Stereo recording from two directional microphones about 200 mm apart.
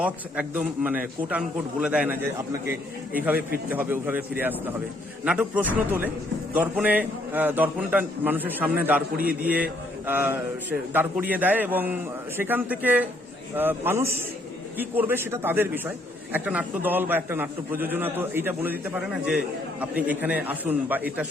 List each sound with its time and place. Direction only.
0.0 s a man's voice: 5° right (ahead or behind)